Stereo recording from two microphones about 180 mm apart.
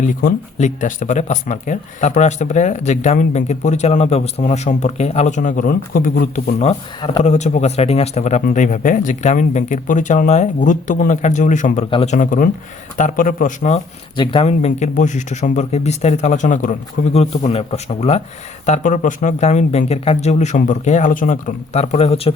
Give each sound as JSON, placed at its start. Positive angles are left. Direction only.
{"t": 0.0, "sound": "speech", "side_deg": 50}
{"t": 7.3, "sound": "a man's voice", "side_deg": 40}
{"t": 14.2, "sound": "speech", "side_deg": 30}
{"t": 17.2, "sound": "speech", "side_deg": 35}